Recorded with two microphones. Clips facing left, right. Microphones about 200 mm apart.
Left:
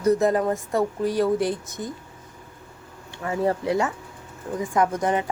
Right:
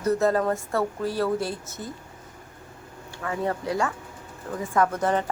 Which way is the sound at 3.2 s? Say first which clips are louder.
Left 4 dB; 25° left (ahead or behind).